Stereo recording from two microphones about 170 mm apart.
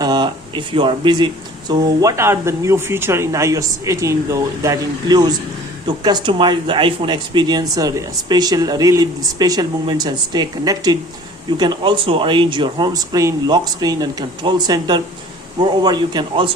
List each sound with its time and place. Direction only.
0.0 s speech: 25° right (ahead or behind)